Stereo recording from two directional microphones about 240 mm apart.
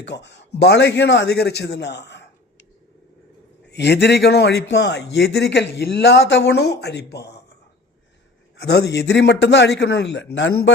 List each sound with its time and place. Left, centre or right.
0.0 s a man's voice: left
3.7 s speech: left
8.5 s speech: left